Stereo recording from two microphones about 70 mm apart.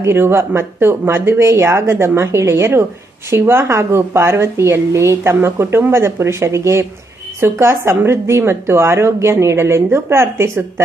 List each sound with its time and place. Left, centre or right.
0.0 s a woman's voice: right